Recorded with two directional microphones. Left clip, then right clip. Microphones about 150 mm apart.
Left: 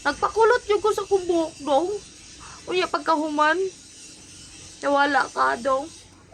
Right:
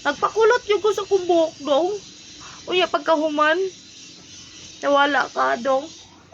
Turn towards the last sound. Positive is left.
turn(degrees=25)  # may be behind; listen again after turning